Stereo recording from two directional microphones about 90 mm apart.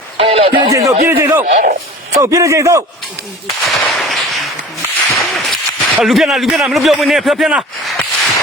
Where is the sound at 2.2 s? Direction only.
35° right (ahead or behind).